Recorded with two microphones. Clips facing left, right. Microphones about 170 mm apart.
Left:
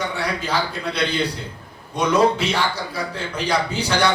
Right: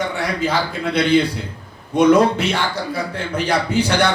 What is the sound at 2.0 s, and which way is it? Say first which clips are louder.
Speech: right 5 dB; 55° right (ahead or behind).